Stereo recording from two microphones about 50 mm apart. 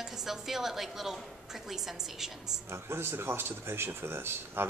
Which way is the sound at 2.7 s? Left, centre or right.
Right.